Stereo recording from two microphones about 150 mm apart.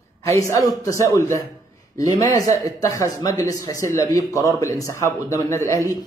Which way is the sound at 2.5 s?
25° left (ahead or behind).